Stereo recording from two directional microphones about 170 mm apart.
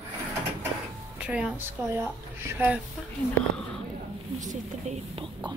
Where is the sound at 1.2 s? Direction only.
5° right (ahead or behind).